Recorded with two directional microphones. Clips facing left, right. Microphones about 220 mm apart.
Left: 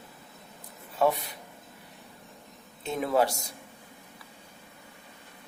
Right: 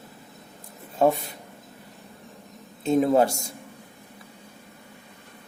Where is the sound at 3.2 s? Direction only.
50° right (ahead or behind).